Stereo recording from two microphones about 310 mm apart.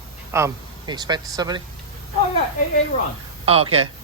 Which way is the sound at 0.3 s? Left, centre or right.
Centre.